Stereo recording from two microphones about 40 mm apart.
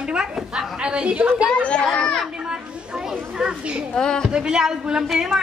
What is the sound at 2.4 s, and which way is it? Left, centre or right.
Children playing, centre.